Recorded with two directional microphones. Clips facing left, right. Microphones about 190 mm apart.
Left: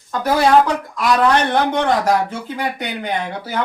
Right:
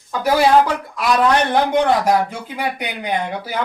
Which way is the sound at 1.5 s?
10° right (ahead or behind).